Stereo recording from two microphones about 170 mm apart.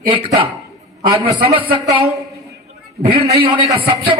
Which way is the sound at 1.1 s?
40° right (ahead or behind).